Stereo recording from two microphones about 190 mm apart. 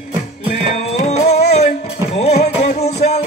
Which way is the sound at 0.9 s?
35° left (ahead or behind).